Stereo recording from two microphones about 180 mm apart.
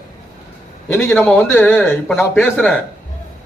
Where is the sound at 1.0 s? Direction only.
10° left (ahead or behind).